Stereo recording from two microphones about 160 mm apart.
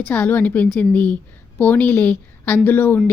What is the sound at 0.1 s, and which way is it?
A woman's voice, 10° left (ahead or behind).